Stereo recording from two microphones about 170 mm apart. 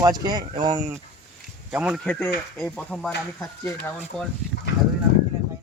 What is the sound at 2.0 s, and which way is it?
Speech, 10° left (ahead or behind).